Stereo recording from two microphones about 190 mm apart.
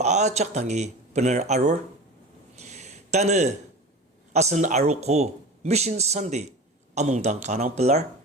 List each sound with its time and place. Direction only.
0.0 s speech: 35° right (ahead or behind)
2.6 s a sound: 35° right (ahead or behind)
4.3 s speech: 35° right (ahead or behind)